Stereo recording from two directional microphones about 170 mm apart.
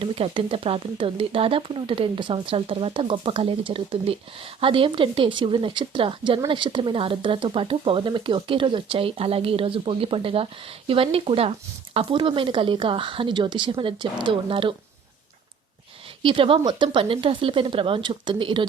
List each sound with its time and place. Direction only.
0.0 s speech: 30° right (ahead or behind)
16.2 s speech: 30° right (ahead or behind)